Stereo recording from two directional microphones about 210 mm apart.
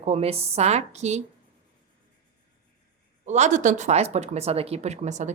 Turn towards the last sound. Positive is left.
turn(degrees=-35)  # may be behind; listen again after turning